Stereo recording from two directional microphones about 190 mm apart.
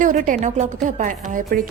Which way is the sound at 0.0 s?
40° right (ahead or behind).